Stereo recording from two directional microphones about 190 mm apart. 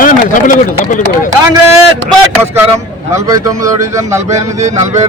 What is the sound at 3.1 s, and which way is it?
A man's voice, 15° right (ahead or behind).